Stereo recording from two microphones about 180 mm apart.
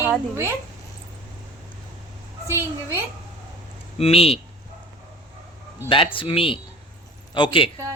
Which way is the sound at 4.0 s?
35° left (ahead or behind).